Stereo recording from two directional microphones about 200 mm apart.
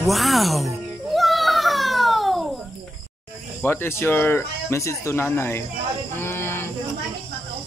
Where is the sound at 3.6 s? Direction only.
10° left (ahead or behind).